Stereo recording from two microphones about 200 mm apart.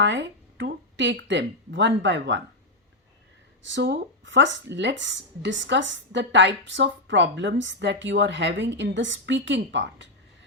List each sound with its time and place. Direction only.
0.0 s speech: 65° right (ahead or behind)
3.6 s speech: 65° right (ahead or behind)